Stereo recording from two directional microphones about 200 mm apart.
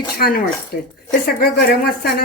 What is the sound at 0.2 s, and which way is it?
Speech, 50° left (ahead or behind).